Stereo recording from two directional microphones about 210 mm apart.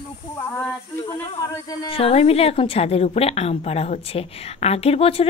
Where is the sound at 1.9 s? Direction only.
25° left (ahead or behind).